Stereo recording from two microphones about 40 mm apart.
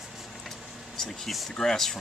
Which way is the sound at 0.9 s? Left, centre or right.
Centre.